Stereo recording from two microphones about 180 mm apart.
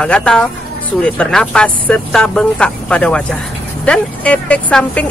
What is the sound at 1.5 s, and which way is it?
Speech, 5° left (ahead or behind).